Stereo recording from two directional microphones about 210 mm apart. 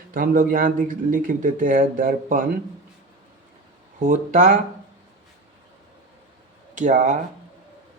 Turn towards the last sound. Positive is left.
turn(degrees=-35)  # may be behind; listen again after turning